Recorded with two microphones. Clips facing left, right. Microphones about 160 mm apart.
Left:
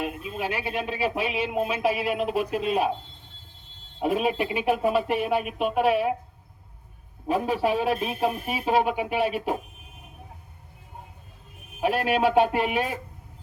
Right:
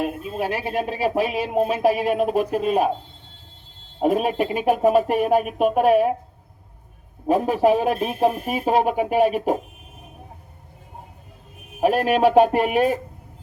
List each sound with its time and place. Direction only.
0.0 s speech: 40° right (ahead or behind)
4.0 s speech: 45° right (ahead or behind)
7.3 s speech: 45° right (ahead or behind)
11.8 s speech: 40° right (ahead or behind)